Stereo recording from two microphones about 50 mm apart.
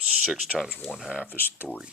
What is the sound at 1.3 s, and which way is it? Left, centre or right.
Speech, left.